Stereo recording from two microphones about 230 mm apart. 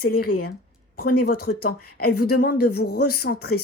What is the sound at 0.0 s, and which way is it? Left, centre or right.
Speech, left.